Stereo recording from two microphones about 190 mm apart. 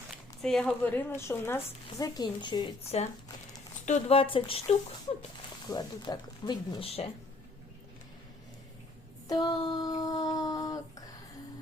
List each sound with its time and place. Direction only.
0.4 s speech: 5° left (ahead or behind); by 4.6 s 30° left (ahead or behind)
5.6 s speech: 20° left (ahead or behind)
9.3 s a sound: 25° left (ahead or behind)